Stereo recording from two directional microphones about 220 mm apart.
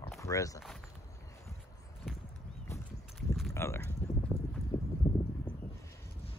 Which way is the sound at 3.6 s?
10° left (ahead or behind).